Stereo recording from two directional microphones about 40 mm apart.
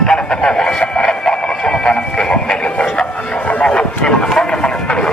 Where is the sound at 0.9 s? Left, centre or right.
Centre.